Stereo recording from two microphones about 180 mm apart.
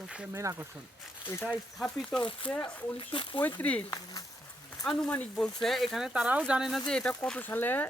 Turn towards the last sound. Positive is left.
turn(degrees=10)  # may be behind; listen again after turning